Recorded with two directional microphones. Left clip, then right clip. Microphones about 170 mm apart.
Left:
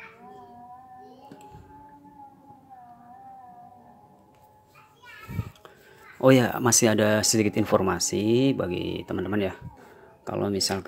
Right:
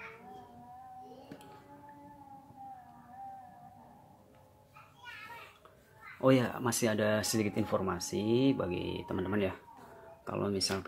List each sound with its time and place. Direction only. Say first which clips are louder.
6.2 s speech: left 9 dB; 35° left (ahead or behind)